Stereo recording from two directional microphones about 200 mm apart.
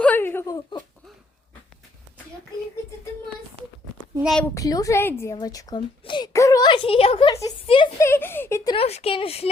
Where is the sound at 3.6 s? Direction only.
30° right (ahead or behind).